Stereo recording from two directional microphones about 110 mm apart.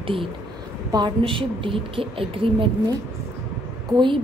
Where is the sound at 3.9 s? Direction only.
45° right (ahead or behind).